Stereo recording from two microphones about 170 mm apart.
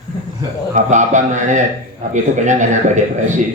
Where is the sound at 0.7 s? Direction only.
45° right (ahead or behind).